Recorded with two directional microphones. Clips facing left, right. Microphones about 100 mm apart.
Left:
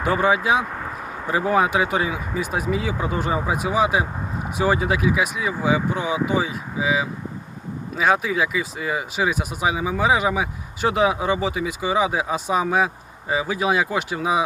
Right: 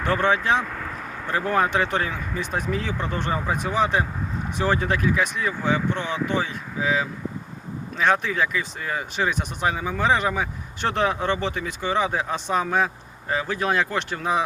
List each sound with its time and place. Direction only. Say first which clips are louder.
0.0 s speech: left 2 dB; 10° left (ahead or behind)
0.7 s vehicle: left 2 dB; 25° left (ahead or behind)
1.3 s speech: left 3 dB; 10° left (ahead or behind)